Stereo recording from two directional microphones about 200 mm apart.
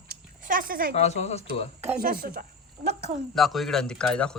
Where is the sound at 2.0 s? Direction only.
50° right (ahead or behind).